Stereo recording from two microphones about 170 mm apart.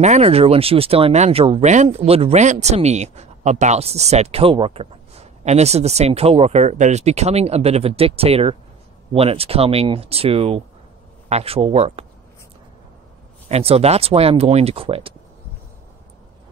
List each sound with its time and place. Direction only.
0.0 s speech: 40° right (ahead or behind)
13.5 s speech: 35° right (ahead or behind)